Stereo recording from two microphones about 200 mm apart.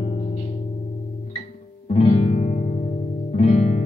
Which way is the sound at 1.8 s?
35° left (ahead or behind).